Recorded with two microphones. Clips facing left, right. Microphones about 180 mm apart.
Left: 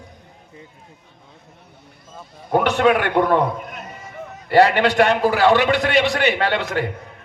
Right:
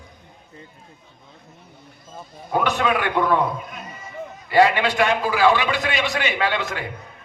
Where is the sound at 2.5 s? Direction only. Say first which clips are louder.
Left 5 dB; 55° left (ahead or behind).